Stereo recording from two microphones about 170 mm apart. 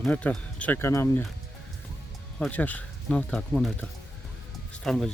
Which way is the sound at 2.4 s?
10° left (ahead or behind).